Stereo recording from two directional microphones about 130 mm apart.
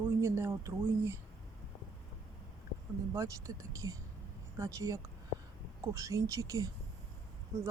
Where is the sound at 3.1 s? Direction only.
25° right (ahead or behind).